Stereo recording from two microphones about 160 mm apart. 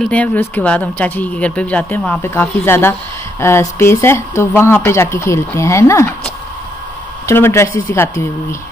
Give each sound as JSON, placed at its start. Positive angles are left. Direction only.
{"t": 0.0, "sound": "speech", "side_deg": 10}
{"t": 7.2, "sound": "speech", "side_deg": 15}